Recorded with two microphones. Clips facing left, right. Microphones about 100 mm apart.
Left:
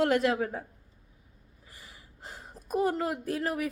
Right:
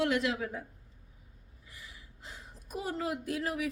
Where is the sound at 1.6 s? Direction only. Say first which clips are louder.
Even; 40° left (ahead or behind).